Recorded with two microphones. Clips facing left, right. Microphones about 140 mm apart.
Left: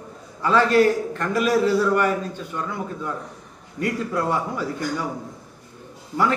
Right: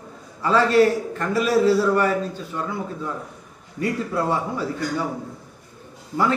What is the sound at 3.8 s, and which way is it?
Speech, 30° right (ahead or behind).